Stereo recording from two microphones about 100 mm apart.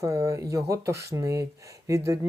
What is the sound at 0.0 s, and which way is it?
Speech, 35° right (ahead or behind).